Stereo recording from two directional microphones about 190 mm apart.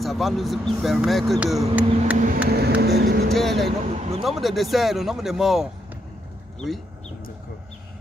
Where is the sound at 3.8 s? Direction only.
35° right (ahead or behind).